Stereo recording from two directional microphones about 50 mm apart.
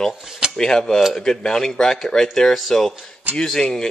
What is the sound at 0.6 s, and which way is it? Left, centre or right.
Speech, centre.